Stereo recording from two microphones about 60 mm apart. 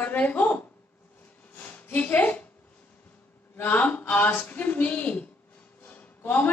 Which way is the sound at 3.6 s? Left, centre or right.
Left.